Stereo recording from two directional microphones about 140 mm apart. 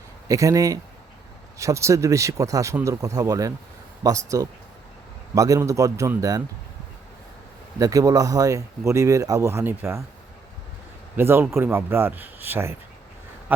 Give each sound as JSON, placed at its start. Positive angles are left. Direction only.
{"t": 0.3, "sound": "speech", "side_deg": -25}
{"t": 7.8, "sound": "speech", "side_deg": -25}
{"t": 11.2, "sound": "speech", "side_deg": -15}